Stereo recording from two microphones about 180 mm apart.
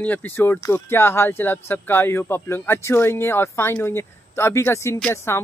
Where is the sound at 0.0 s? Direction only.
10° left (ahead or behind).